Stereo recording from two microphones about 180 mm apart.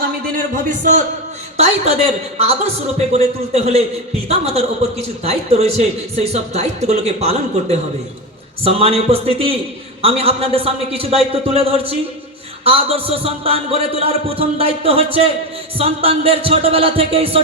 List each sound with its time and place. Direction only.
0.3 s a man's voice: 45° right (ahead or behind)